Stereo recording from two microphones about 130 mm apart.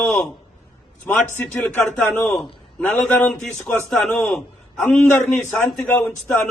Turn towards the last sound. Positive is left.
turn(degrees=15)  # may be behind; listen again after turning